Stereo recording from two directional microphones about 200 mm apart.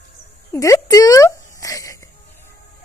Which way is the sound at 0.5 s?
15° left (ahead or behind).